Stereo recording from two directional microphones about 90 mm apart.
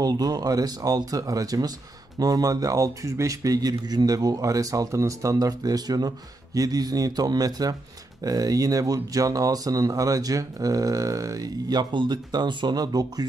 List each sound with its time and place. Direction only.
0.0 s speech: 45° right (ahead or behind)